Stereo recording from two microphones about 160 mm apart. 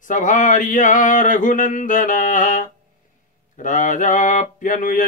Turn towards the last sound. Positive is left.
turn(degrees=55)  # may be behind; listen again after turning